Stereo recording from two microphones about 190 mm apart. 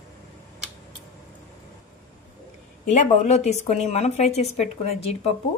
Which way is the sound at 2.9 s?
35° left (ahead or behind).